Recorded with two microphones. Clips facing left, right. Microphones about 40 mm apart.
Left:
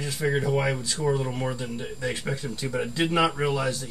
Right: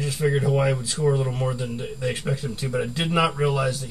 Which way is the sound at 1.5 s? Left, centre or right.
Centre.